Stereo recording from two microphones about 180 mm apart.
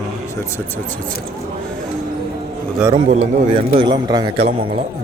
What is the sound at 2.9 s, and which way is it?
Speech, 40° right (ahead or behind).